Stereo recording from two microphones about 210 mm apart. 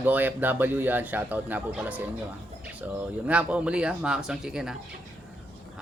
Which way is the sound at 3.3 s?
5° right (ahead or behind).